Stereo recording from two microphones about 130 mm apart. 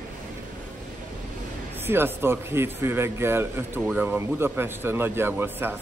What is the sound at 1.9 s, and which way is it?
Speech, 15° right (ahead or behind).